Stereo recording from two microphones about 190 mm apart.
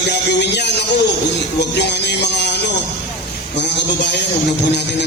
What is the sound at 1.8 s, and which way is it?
Speech, 65° left (ahead or behind).